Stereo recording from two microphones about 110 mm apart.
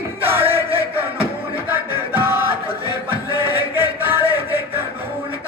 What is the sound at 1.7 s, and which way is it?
Music, 20° right (ahead or behind).